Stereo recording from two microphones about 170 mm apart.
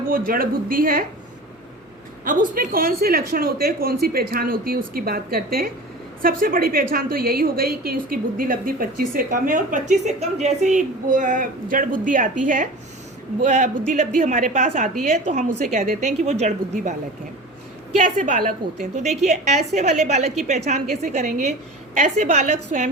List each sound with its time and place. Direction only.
0.1 s a woman's voice: 55° right (ahead or behind)
2.2 s a woman's voice: 50° right (ahead or behind)
17.9 s a woman's voice: 50° right (ahead or behind)